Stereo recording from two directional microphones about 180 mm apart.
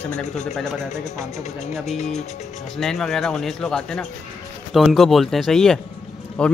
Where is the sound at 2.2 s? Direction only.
40° left (ahead or behind).